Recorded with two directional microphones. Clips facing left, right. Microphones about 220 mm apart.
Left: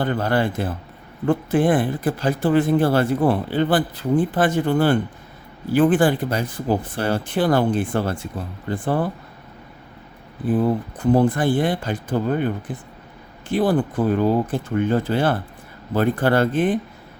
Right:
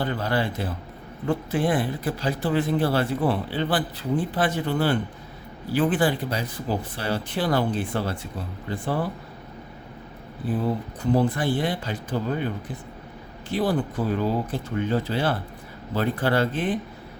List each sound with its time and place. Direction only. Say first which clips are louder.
0.0 s speech: left 5 dB; 50° left (ahead or behind)
10.5 s speech: left 6 dB; 50° left (ahead or behind)